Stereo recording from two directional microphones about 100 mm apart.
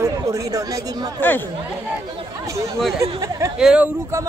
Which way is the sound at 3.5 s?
10° right (ahead or behind).